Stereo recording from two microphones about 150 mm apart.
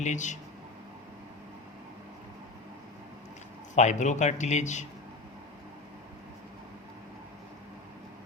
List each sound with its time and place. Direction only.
0.0 s a man's voice: 55° left (ahead or behind)
3.8 s a man's voice: 50° left (ahead or behind)